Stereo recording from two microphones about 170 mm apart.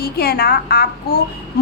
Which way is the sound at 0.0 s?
70° left (ahead or behind).